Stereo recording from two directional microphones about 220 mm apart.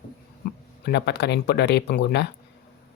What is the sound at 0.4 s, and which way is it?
Speech, 50° left (ahead or behind).